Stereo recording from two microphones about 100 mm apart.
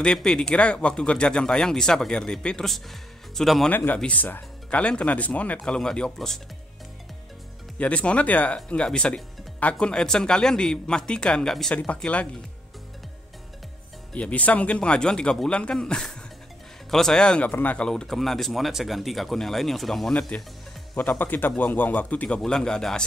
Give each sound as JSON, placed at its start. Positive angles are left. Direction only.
{"t": 0.0, "sound": "speech", "side_deg": 5}
{"t": 3.7, "sound": "speech", "side_deg": 15}
{"t": 7.8, "sound": "speech", "side_deg": 10}
{"t": 14.1, "sound": "speech", "side_deg": 15}